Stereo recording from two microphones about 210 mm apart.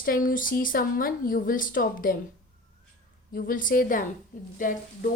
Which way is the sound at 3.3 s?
45° left (ahead or behind).